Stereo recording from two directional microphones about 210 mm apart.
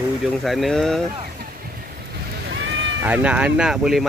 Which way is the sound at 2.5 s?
60° right (ahead or behind).